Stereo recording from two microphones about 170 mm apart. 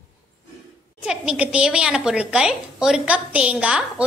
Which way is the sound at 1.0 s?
5° right (ahead or behind).